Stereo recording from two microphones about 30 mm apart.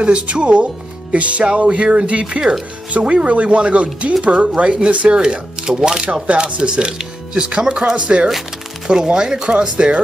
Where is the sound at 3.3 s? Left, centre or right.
Right.